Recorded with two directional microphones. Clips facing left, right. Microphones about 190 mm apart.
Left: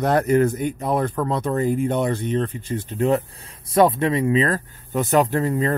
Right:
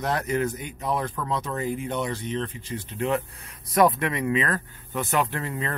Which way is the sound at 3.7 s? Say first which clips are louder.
Left 4 dB; 30° left (ahead or behind).